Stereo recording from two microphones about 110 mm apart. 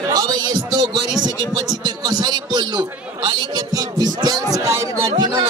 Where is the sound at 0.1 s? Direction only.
35° right (ahead or behind).